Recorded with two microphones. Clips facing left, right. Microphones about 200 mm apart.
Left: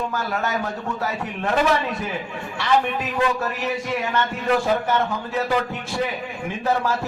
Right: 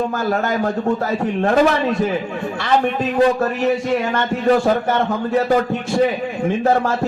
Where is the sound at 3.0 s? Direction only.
30° right (ahead or behind).